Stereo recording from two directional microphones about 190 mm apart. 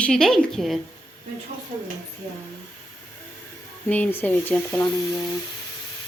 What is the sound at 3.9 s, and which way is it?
A woman's voice, 10° left (ahead or behind).